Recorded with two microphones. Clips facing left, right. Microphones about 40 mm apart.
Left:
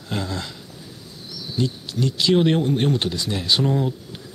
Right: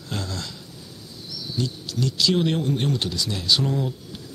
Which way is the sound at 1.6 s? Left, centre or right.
Left.